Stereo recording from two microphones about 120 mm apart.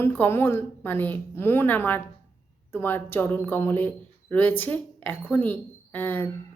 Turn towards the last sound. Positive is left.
turn(degrees=15)  # may be behind; listen again after turning